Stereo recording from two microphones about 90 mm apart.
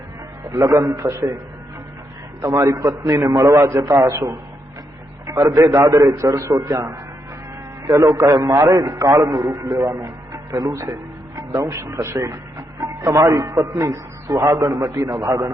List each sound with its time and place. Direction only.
0.5 s a man's voice: 45° right (ahead or behind)
0.9 s a man's voice: 35° right (ahead or behind)
2.4 s a man's voice: 35° right (ahead or behind)